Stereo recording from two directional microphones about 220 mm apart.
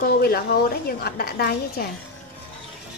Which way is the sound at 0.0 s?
45° left (ahead or behind).